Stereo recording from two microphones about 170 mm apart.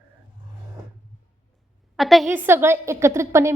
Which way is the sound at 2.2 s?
15° right (ahead or behind).